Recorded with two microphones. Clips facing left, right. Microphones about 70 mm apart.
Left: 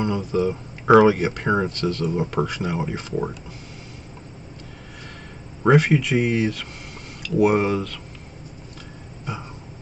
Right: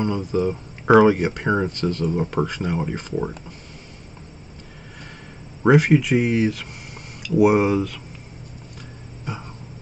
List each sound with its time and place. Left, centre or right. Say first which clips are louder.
0.0 s speech: even; centre
5.6 s speech: right 1 dB; centre